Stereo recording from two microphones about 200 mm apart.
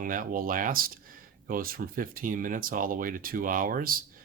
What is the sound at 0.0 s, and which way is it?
Speech, 45° right (ahead or behind).